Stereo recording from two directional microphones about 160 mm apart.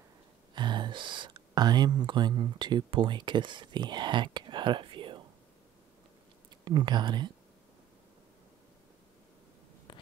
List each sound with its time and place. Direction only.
0.6 s speech: 30° right (ahead or behind)
6.6 s speech: 25° right (ahead or behind)